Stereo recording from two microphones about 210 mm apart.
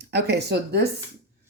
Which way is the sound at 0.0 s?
50° right (ahead or behind).